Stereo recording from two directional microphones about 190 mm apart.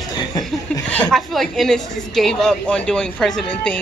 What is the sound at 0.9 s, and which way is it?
A woman's voice, 5° left (ahead or behind).